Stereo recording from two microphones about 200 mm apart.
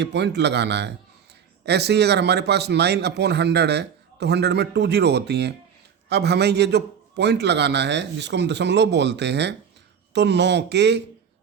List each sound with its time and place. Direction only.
0.0 s a man's voice: 60° right (ahead or behind)